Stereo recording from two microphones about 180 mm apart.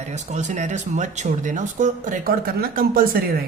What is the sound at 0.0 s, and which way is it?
Speech, 40° right (ahead or behind).